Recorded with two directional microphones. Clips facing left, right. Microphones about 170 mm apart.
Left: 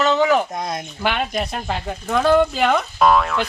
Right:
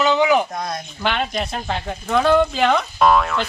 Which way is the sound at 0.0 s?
Centre (ahead or behind).